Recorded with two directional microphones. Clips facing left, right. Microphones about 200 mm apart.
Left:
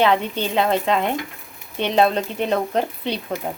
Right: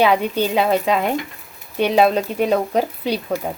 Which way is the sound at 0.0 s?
10° right (ahead or behind).